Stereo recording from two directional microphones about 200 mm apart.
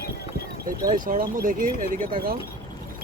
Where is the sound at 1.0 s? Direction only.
45° right (ahead or behind).